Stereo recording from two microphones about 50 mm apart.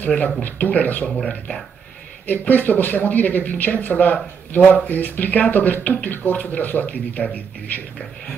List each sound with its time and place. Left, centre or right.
0.0 s speech: left
2.2 s speech: left